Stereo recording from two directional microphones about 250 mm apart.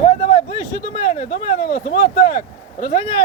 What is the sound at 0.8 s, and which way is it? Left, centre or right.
Speech, left.